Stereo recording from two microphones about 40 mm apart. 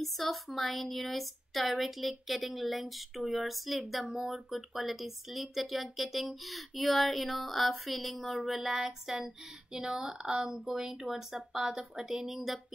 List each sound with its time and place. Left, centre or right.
0.0 s a woman's voice: centre